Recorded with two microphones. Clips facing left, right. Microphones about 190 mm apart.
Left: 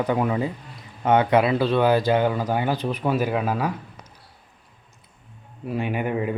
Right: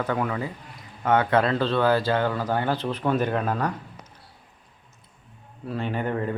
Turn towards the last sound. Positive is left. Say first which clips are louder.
# left 2 dB
turn(degrees=10)  # may be behind; listen again after turning